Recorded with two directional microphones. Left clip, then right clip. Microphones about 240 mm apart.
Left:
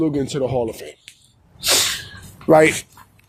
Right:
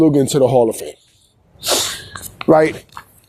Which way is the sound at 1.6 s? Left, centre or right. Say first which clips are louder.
Even; right.